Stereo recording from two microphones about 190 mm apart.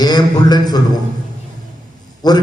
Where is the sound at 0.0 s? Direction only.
20° left (ahead or behind).